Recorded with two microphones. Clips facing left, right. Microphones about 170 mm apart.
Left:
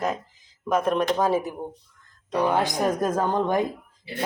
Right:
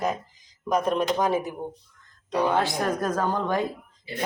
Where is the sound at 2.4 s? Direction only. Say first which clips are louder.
Left 1 dB; 10° left (ahead or behind).